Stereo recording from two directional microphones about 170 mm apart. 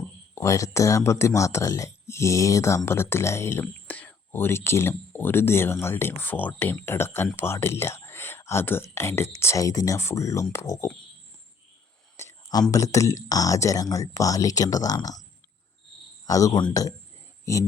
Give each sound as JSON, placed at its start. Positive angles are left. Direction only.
{"t": 0.3, "sound": "speech", "side_deg": 20}
{"t": 12.1, "sound": "whispering", "side_deg": 20}
{"t": 12.7, "sound": "speech", "side_deg": 20}
{"t": 16.2, "sound": "speech", "side_deg": 20}